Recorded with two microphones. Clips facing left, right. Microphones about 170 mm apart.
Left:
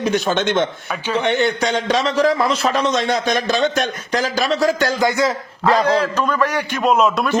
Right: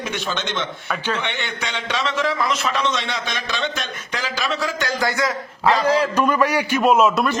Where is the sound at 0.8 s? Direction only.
10° left (ahead or behind).